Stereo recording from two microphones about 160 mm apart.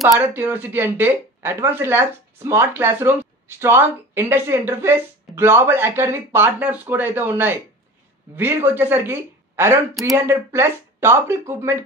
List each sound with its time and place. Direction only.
0.0 s speech: 15° right (ahead or behind)